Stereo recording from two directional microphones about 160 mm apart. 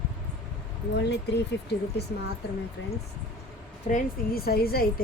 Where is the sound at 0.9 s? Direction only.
90° left.